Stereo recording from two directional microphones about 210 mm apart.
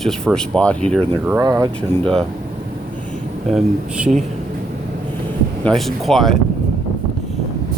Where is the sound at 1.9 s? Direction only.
5° left (ahead or behind).